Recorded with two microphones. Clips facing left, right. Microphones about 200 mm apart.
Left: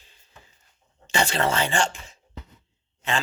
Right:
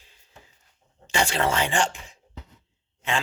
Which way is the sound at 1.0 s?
10° right (ahead or behind).